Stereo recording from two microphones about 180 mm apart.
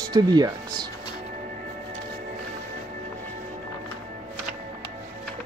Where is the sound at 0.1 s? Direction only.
20° right (ahead or behind).